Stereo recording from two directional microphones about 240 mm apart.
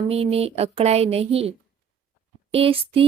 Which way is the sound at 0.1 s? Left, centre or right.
Right.